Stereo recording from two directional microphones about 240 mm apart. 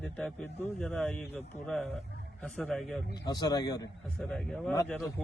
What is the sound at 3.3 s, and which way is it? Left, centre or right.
Speech, centre.